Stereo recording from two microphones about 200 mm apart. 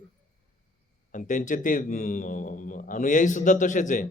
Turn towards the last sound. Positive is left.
turn(degrees=40)  # may be behind; listen again after turning